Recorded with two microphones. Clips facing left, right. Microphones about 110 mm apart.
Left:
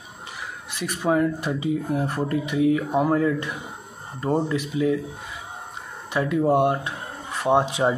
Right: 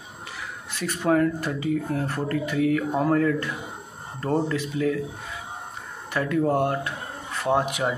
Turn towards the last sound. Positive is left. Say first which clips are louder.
# left 3 dB
turn(degrees=25)  # may be behind; listen again after turning